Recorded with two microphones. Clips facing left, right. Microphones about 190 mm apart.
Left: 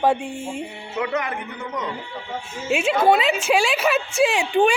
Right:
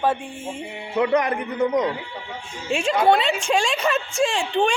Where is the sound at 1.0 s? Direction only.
35° right (ahead or behind).